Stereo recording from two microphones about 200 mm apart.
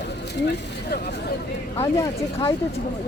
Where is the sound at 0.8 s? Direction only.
50° left (ahead or behind).